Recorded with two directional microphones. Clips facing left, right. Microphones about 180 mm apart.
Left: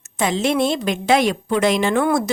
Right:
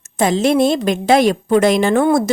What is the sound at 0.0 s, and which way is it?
Speech, 40° right (ahead or behind).